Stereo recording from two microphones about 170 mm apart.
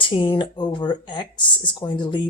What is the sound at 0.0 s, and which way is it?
Speech, 30° left (ahead or behind).